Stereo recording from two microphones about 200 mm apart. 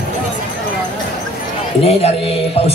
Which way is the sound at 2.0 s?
30° left (ahead or behind).